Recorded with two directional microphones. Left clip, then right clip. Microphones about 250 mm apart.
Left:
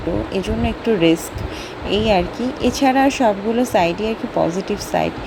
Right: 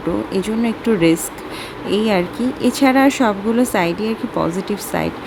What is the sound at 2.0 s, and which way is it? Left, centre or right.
Speech, centre.